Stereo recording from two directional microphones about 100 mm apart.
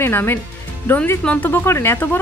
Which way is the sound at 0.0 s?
20° left (ahead or behind).